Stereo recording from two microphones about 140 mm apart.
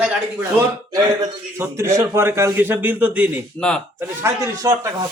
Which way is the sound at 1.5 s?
20° right (ahead or behind).